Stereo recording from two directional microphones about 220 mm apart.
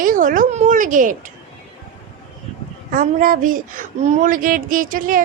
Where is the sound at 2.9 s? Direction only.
40° right (ahead or behind).